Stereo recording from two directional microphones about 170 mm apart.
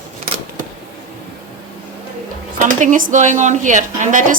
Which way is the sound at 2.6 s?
50° right (ahead or behind).